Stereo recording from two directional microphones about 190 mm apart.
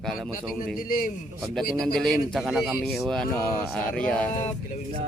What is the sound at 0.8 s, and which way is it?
Speech, 50° left (ahead or behind).